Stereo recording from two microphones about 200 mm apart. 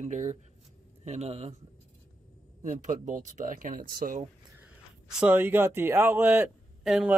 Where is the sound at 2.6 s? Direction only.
40° right (ahead or behind).